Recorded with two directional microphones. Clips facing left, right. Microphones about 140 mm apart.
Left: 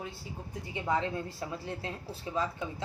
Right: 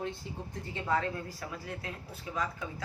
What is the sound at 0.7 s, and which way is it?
A woman's voice, 20° left (ahead or behind).